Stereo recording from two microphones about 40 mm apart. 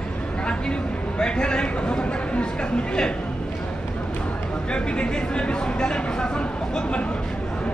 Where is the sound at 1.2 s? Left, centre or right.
Left.